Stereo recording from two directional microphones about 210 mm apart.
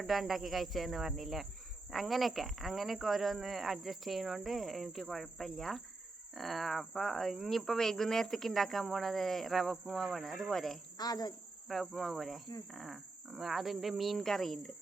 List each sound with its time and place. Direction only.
0.0 s speech: centre (ahead or behind)
10.9 s speech: 20° left (ahead or behind)
11.7 s speech: centre (ahead or behind)